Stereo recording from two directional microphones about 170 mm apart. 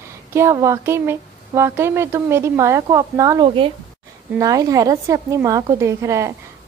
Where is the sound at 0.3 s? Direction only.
15° right (ahead or behind).